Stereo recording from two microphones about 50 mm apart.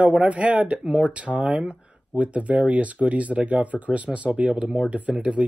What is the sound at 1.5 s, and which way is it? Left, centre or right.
Speech, centre.